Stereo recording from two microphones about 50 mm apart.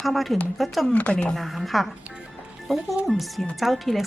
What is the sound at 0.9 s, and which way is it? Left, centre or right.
Speech, left.